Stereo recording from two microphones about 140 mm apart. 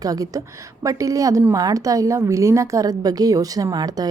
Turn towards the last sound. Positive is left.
turn(degrees=-30)  # may be behind; listen again after turning